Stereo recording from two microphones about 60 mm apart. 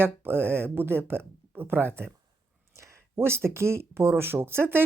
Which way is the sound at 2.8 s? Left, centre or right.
Right.